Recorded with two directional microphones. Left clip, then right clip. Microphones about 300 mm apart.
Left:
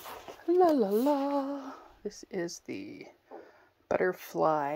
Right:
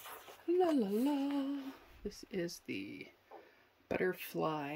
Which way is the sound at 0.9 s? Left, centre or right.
Left.